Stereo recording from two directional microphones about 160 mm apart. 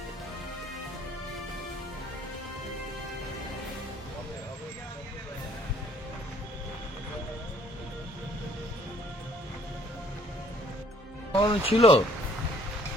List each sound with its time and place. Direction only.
11.3 s speech: 35° left (ahead or behind)